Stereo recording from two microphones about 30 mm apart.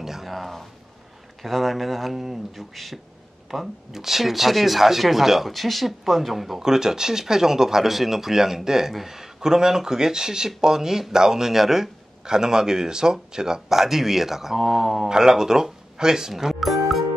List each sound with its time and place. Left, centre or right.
0.0 s a sound: centre
0.3 s a sound: centre
1.4 s speech: centre
3.4 s speech: centre
6.6 s speech: centre
15.0 s speech: right
16.5 s music: centre